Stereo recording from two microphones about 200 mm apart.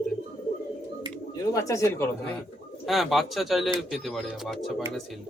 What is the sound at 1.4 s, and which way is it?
Speech, 15° left (ahead or behind).